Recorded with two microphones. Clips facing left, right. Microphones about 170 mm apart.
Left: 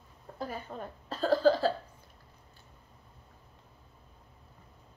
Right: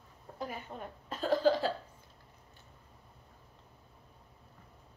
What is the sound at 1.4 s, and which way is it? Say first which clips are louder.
Hiccup: left 3 dB; 40° left (ahead or behind).